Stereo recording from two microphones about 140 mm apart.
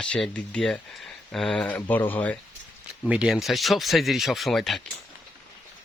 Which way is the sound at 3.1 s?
5° right (ahead or behind).